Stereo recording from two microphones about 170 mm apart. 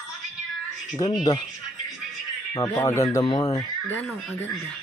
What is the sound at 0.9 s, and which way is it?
Speech, 25° left (ahead or behind).